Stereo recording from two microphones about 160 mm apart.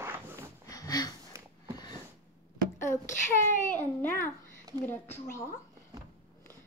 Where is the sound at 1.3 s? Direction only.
20° right (ahead or behind).